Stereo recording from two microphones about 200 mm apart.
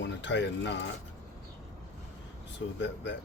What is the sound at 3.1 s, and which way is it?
Speech, 60° left (ahead or behind).